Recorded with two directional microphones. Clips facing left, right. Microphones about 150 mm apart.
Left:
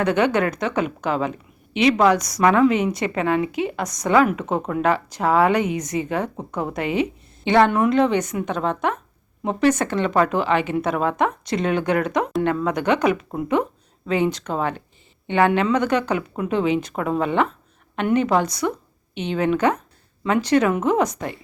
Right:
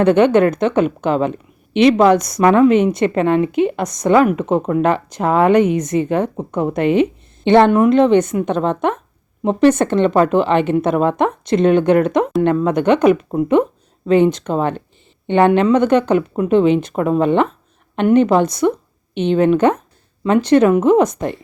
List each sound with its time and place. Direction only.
0.0 s speech: 25° right (ahead or behind)
19.1 s speech: 10° left (ahead or behind)
19.4 s speech: 25° right (ahead or behind)